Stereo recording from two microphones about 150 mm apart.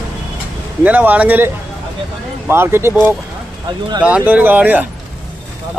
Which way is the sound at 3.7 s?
30° right (ahead or behind).